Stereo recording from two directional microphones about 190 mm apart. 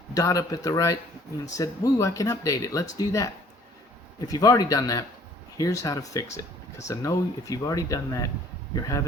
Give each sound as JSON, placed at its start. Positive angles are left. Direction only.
{"t": 0.1, "sound": "speech", "side_deg": 20}